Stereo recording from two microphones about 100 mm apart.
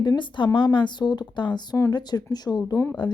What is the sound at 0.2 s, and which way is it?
A woman's voice, 55° left (ahead or behind).